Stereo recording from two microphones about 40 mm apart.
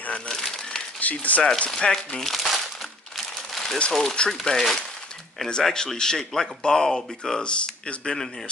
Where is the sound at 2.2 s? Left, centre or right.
Centre.